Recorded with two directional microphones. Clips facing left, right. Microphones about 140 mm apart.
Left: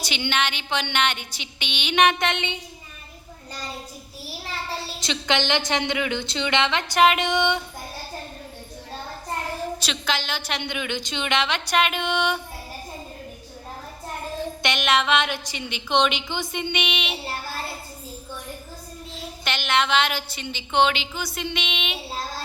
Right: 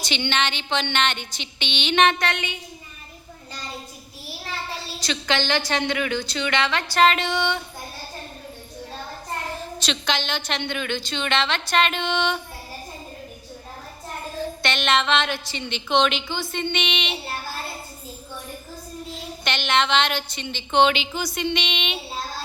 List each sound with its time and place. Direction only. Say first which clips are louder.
0.0 s a woman's voice: right 1 dB; 5° left (ahead or behind)
2.1 s a woman's voice: left 1 dB; 20° left (ahead or behind)
4.9 s a woman's voice: even; 20° left (ahead or behind)
9.8 s a woman's voice: right 2 dB; 5° left (ahead or behind)
14.6 s a woman's voice: even; 10° left (ahead or behind)
19.1 s a woman's voice: right 1 dB; centre (ahead or behind)